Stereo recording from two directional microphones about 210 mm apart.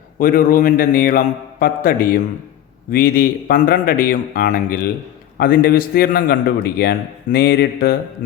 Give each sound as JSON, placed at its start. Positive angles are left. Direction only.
{"t": 0.2, "sound": "a man's voice", "side_deg": 40}